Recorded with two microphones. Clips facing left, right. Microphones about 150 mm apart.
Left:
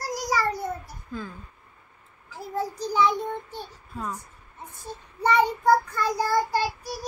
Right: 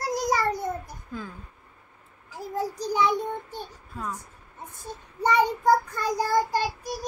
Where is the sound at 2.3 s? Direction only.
15° right (ahead or behind).